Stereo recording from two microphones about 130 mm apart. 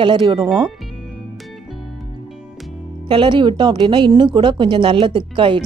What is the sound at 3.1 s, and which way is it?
Speech, 40° right (ahead or behind).